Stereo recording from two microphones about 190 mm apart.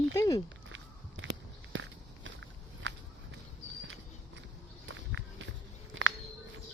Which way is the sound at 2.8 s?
90° right.